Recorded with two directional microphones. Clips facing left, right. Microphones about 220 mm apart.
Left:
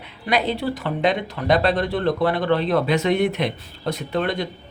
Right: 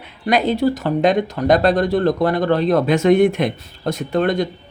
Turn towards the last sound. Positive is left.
turn(degrees=-45)  # may be behind; listen again after turning